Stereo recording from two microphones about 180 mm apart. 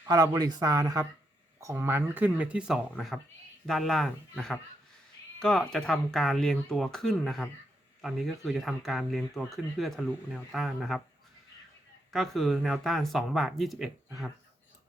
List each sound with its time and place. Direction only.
0.1 s speech: 20° right (ahead or behind); by 11.0 s centre (ahead or behind)
12.1 s speech: centre (ahead or behind)